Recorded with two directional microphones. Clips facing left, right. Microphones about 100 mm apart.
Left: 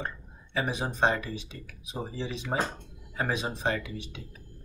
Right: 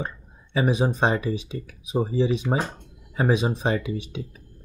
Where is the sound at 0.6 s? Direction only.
20° right (ahead or behind).